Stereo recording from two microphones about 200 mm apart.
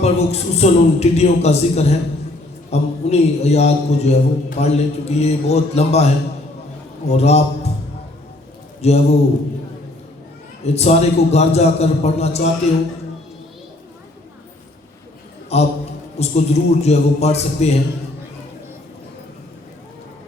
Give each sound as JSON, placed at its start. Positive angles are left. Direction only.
{"t": 0.0, "sound": "a man's voice", "side_deg": 30}
{"t": 7.1, "sound": "a man's voice", "side_deg": 30}
{"t": 8.8, "sound": "a man's voice", "side_deg": 30}
{"t": 10.6, "sound": "a man's voice", "side_deg": 30}
{"t": 15.5, "sound": "a man's voice", "side_deg": 30}